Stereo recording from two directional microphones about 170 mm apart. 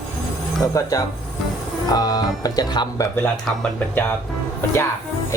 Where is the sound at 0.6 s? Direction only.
20° left (ahead or behind).